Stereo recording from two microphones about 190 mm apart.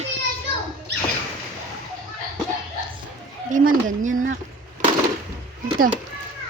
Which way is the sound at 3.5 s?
45° right (ahead or behind).